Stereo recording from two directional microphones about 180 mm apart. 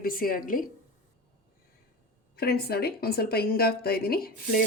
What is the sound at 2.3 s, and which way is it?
A woman's voice, 60° left (ahead or behind).